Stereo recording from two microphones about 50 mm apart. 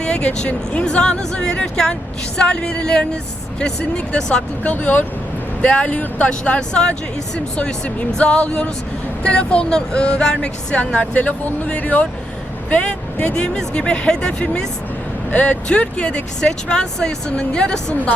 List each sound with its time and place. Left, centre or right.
0.0 s speech: left
4.7 s speech: left; by 14.7 s centre
15.3 s speech: left